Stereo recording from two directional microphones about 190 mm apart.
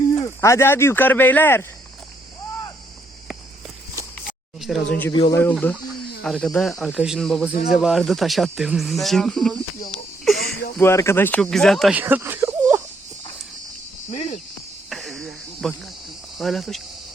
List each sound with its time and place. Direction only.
0.2 s speech: 15° left (ahead or behind)
4.3 s a sound: centre (ahead or behind)
5.3 s speech: 10° left (ahead or behind)
10.3 s a sound: centre (ahead or behind)
10.8 s speech: 15° left (ahead or behind); by 12.8 s 15° right (ahead or behind)
14.1 s speech: 35° left (ahead or behind)
14.8 s cricket: centre (ahead or behind)
16.4 s speech: centre (ahead or behind)